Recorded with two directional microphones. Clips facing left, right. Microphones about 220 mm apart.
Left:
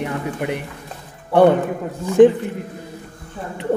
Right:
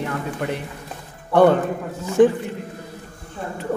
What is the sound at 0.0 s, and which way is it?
Speech, 15° left (ahead or behind).